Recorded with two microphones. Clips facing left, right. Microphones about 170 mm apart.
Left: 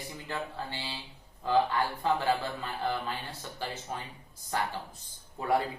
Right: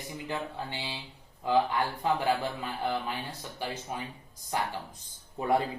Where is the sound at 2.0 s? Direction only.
15° right (ahead or behind).